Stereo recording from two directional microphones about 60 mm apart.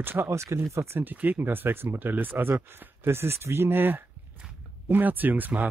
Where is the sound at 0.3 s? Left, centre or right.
Right.